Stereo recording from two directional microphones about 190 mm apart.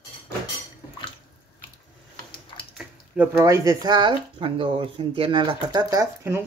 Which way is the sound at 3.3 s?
15° right (ahead or behind).